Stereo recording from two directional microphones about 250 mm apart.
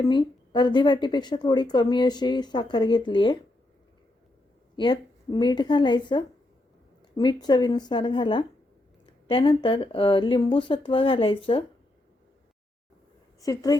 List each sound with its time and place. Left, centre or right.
0.1 s a woman's voice: centre
4.8 s a woman's voice: centre
13.4 s a woman's voice: centre